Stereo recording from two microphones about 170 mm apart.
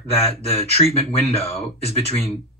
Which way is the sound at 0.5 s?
35° left (ahead or behind).